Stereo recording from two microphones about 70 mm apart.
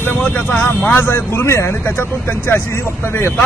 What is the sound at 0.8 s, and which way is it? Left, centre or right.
Speech, left.